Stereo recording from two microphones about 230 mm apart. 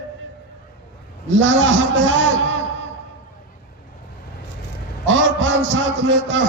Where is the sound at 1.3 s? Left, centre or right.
Right.